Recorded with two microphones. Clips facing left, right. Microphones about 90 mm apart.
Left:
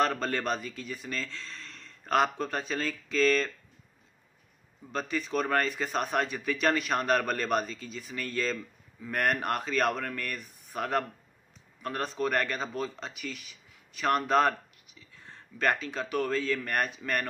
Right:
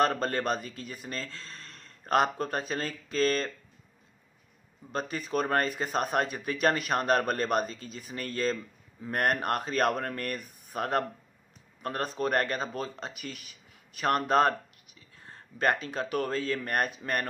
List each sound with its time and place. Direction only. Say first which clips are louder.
0.0 s speech: right 1 dB; 40° right (ahead or behind)
4.9 s speech: even; 45° right (ahead or behind)
15.0 s whispering: even; 45° right (ahead or behind)
15.8 s speech: even; 45° right (ahead or behind)